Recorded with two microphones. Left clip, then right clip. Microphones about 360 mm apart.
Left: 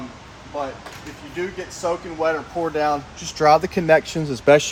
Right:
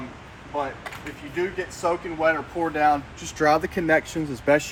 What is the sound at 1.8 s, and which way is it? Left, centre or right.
Speech, centre.